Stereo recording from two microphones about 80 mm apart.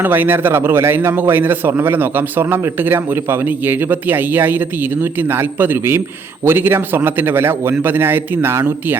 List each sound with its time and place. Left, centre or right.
0.0 s a man's voice: right